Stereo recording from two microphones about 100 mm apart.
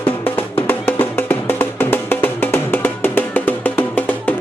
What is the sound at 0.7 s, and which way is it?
Music, 20° left (ahead or behind).